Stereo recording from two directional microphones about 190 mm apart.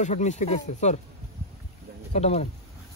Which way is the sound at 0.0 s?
40° left (ahead or behind).